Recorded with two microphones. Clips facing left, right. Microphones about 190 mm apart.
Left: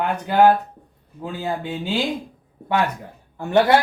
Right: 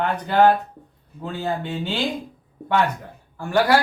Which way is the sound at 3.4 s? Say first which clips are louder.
Left 2 dB; 20° left (ahead or behind).